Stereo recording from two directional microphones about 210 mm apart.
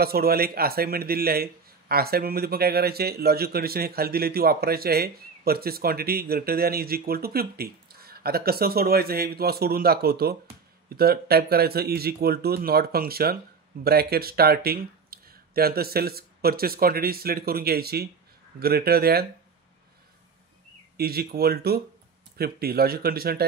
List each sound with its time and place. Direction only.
0.0 s speech: 45° right (ahead or behind)
21.0 s speech: 45° right (ahead or behind)